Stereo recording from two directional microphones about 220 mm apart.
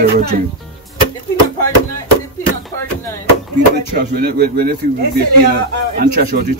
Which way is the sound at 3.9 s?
45° right (ahead or behind).